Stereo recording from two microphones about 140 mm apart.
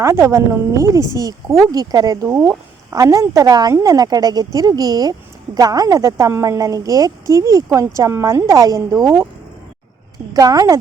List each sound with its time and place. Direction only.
0.0 s a woman's voice: 20° right (ahead or behind)
10.3 s a woman's voice: 25° right (ahead or behind)